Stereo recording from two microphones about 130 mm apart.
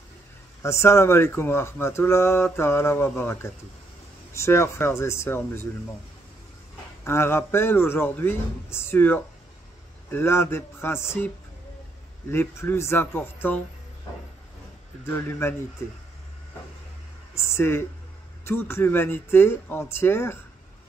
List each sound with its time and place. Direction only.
0.6 s speech: 20° left (ahead or behind)
7.1 s a man's voice: 20° left (ahead or behind)
12.3 s a man's voice: 20° left (ahead or behind)
15.0 s a man's voice: 15° left (ahead or behind)
17.4 s a man's voice: 20° left (ahead or behind)